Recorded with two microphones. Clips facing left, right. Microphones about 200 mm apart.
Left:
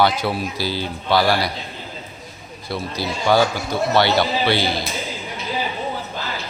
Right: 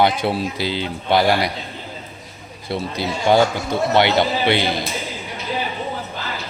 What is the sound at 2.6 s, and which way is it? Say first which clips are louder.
A man's voice: right 2 dB; 20° right (ahead or behind).